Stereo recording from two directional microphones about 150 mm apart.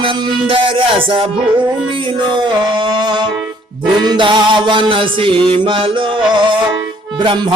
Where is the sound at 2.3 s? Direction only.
30° right (ahead or behind).